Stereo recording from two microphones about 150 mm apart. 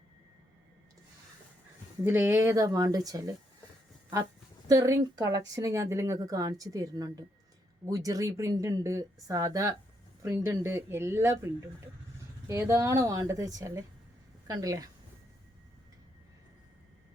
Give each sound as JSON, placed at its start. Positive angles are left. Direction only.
{"t": 2.0, "sound": "speech", "side_deg": -15}
{"t": 4.7, "sound": "speech", "side_deg": -20}